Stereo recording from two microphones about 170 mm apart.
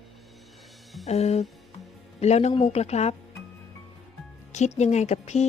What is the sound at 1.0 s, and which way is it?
Speech, 40° left (ahead or behind).